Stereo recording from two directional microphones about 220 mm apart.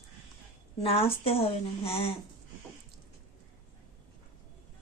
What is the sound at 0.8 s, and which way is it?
Speech, 25° left (ahead or behind).